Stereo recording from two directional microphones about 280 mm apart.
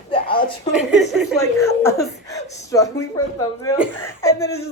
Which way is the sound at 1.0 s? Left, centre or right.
Centre.